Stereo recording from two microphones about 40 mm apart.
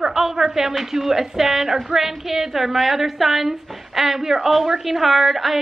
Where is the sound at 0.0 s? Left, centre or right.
Centre.